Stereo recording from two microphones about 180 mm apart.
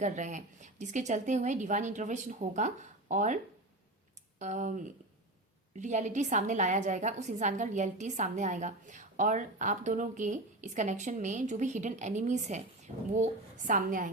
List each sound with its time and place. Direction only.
0.0 s a woman's voice: 45° right (ahead or behind)
4.4 s a woman's voice: 40° right (ahead or behind)